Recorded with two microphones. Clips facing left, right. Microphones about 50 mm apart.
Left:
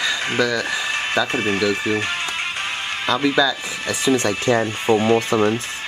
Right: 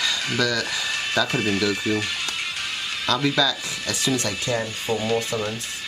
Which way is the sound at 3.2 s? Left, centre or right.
Left.